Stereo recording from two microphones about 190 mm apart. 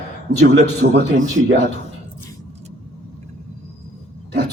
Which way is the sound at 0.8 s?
55° right (ahead or behind).